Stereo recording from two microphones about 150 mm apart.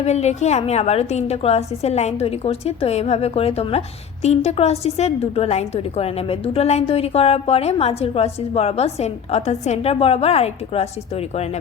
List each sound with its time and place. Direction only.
0.0 s a woman's voice: 45° left (ahead or behind)